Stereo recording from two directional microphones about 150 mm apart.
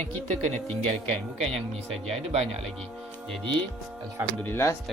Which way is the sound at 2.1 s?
40° right (ahead or behind).